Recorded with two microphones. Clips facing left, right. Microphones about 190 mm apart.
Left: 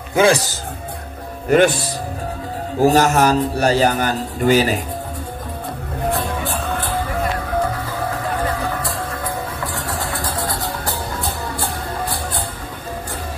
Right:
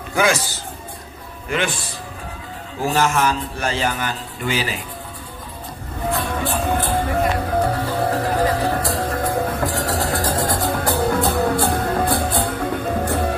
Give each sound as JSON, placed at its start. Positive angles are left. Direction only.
{"t": 0.1, "sound": "speech", "side_deg": 30}
{"t": 1.5, "sound": "speech", "side_deg": 45}
{"t": 2.8, "sound": "speech", "side_deg": 40}
{"t": 8.1, "sound": "music", "side_deg": -35}